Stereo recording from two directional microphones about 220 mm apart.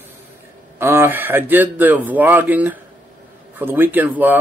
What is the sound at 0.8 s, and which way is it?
Speech, 10° right (ahead or behind).